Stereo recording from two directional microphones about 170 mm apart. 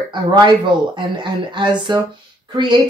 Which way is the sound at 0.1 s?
25° right (ahead or behind).